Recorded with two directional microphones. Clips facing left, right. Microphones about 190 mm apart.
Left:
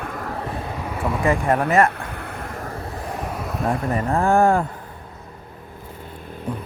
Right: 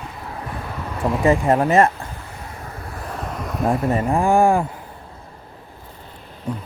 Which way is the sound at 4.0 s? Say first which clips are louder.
Even; 10° right (ahead or behind).